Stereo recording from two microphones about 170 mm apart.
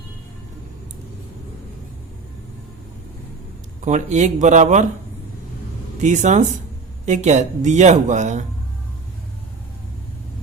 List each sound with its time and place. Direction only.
3.8 s speech: 45° right (ahead or behind)
6.0 s speech: 45° right (ahead or behind)